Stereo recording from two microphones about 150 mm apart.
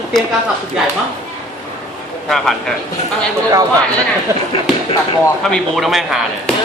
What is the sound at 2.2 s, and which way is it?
Speech, centre (ahead or behind).